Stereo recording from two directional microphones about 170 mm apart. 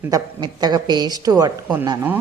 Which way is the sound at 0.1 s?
25° right (ahead or behind).